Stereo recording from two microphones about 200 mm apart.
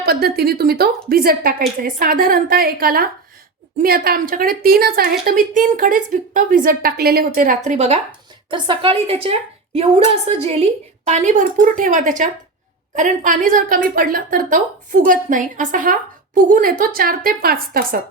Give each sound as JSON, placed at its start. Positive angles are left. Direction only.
{"t": 0.0, "sound": "a woman's voice", "side_deg": -50}
{"t": 8.4, "sound": "a woman's voice", "side_deg": -25}